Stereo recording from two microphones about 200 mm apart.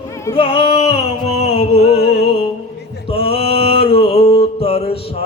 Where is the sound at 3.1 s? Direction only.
30° left (ahead or behind).